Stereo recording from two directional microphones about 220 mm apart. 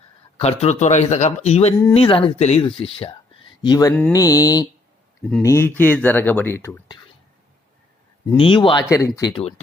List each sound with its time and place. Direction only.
0.3 s speech: 30° left (ahead or behind); by 6.8 s 10° left (ahead or behind)
8.4 s speech: 25° left (ahead or behind)